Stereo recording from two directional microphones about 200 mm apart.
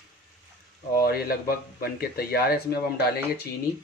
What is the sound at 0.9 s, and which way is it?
A man's voice, 50° left (ahead or behind).